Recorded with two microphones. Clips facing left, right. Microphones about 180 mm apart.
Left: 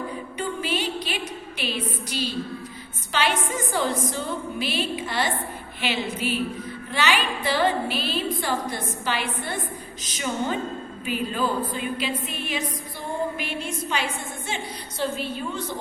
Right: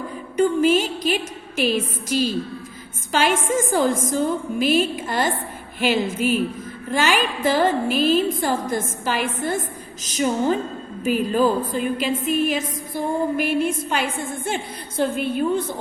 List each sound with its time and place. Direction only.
0.3 s a woman's voice: 45° right (ahead or behind)